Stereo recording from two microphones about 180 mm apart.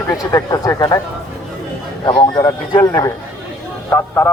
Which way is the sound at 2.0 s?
25° left (ahead or behind).